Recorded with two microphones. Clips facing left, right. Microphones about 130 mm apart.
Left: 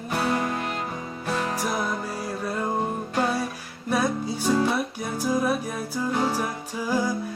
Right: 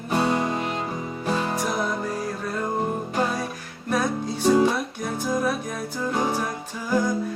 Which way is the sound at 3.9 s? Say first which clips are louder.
Even; 5° left (ahead or behind).